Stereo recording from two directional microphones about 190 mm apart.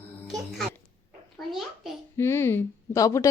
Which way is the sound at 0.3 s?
Centre (ahead or behind).